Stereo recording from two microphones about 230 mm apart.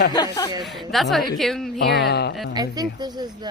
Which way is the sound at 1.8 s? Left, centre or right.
Left.